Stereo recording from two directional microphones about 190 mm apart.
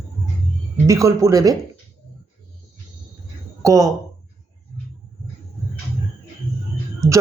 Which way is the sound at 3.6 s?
15° right (ahead or behind).